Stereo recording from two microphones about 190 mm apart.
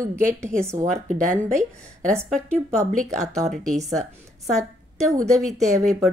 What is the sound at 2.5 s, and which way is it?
Speech, 40° right (ahead or behind).